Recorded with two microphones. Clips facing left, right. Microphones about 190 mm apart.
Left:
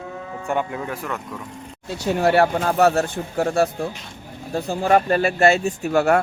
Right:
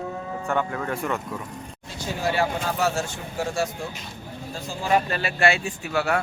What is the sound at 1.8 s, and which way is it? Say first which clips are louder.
Speech: left 8 dB; 65° left (ahead or behind).